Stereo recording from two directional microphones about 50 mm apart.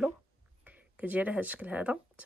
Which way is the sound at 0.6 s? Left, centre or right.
Right.